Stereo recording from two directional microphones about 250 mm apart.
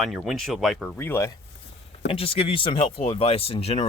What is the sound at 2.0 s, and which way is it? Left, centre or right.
Speech, left.